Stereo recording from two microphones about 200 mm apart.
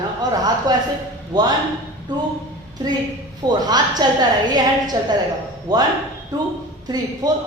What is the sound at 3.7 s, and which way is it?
A woman's voice, 20° right (ahead or behind).